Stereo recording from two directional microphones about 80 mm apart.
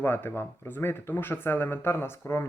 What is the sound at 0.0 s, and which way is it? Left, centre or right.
Speech, left.